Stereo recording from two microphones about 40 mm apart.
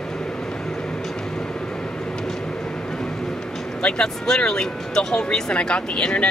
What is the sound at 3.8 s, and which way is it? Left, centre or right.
Speech, centre.